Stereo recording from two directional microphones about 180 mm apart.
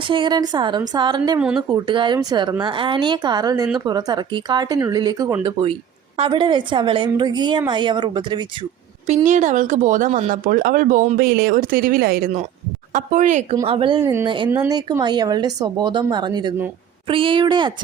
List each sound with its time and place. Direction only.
0.1 s speech: 25° right (ahead or behind)
1.4 s speech: 5° right (ahead or behind)
1.7 s speech: 25° right (ahead or behind)
9.0 s speech: 40° right (ahead or behind); by 12.3 s 55° right (ahead or behind)
12.9 s speech: 45° right (ahead or behind)
13.7 s speech: 30° right (ahead or behind)
14.0 s speech: 15° right (ahead or behind)